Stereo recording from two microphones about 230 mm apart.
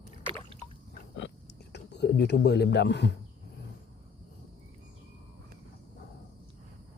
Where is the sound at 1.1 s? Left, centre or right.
Left.